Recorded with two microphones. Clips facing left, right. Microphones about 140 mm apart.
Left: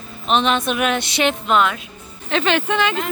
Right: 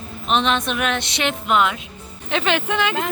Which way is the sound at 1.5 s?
15° right (ahead or behind).